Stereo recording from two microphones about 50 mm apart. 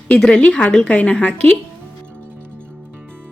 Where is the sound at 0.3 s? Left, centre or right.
Left.